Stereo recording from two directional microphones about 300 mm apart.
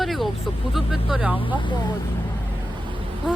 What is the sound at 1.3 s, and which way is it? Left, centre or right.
Speech, centre.